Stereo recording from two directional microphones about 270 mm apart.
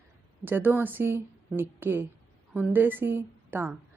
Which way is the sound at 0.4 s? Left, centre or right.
Centre.